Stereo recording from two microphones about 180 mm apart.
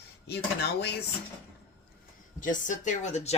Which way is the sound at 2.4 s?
45° left (ahead or behind).